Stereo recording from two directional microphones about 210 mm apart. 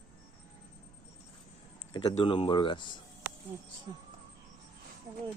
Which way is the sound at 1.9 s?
20° left (ahead or behind).